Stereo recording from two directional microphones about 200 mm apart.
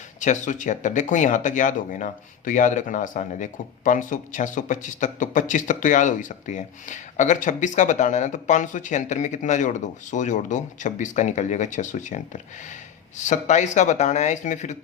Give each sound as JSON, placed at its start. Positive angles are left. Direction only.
{"t": 0.2, "sound": "speech", "side_deg": 40}